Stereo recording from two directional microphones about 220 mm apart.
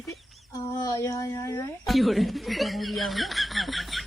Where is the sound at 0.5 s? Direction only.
15° left (ahead or behind).